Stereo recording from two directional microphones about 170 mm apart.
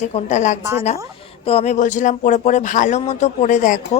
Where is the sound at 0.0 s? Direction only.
45° left (ahead or behind).